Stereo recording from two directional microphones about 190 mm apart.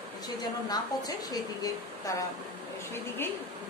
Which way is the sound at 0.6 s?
20° left (ahead or behind).